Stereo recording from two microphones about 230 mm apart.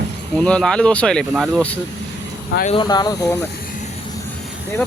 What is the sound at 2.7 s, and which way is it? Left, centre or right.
Speech, centre.